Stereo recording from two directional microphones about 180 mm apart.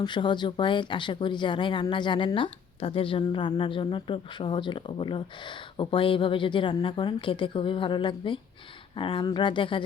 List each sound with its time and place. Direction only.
0.0 s speech: 25° left (ahead or behind)